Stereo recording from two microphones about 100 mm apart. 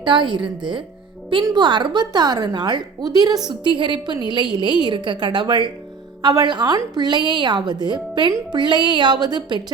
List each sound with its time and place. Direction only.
0.0 s a woman's voice: 50° right (ahead or behind)